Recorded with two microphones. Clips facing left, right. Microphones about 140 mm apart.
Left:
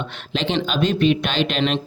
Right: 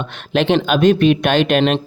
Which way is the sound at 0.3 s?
55° right (ahead or behind).